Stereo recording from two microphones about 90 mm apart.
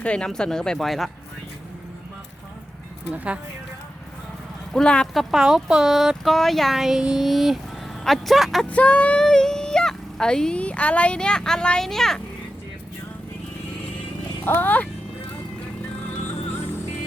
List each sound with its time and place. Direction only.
0.0 s speech: 10° left (ahead or behind)
4.7 s speech: 10° left (ahead or behind)
5.1 s speech: 5° right (ahead or behind)
8.7 s speech: 15° left (ahead or behind)
14.4 s speech: 20° left (ahead or behind)